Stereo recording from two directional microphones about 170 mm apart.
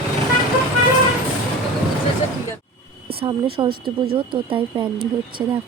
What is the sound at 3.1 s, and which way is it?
Speech, 35° right (ahead or behind).